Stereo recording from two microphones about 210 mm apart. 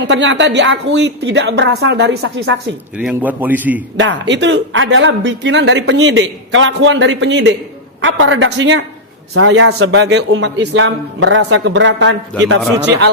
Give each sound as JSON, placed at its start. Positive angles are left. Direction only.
{"t": 0.1, "sound": "speech", "side_deg": -60}
{"t": 3.0, "sound": "a man's voice", "side_deg": -5}
{"t": 3.9, "sound": "speech", "side_deg": -60}
{"t": 9.3, "sound": "speech", "side_deg": -75}